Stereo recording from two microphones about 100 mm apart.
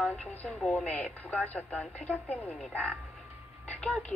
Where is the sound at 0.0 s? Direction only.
10° left (ahead or behind).